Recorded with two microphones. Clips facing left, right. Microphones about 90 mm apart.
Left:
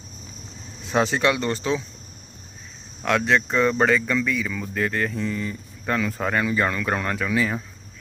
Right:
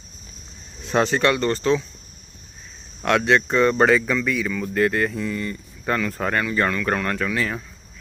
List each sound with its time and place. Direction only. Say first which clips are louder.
0.9 s speech: right 2 dB; 5° left (ahead or behind)
3.0 s speech: right 2 dB; centre (ahead or behind)
6.4 s speech: right 1 dB; 15° left (ahead or behind)